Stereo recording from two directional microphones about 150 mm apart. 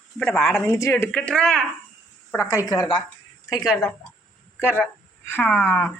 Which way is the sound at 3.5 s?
25° left (ahead or behind).